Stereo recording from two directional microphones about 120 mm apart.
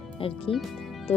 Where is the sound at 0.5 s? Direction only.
Centre (ahead or behind).